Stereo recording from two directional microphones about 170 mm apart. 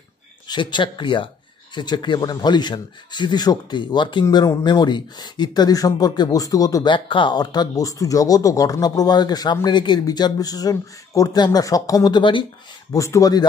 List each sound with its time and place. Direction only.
0.5 s speech: 25° left (ahead or behind)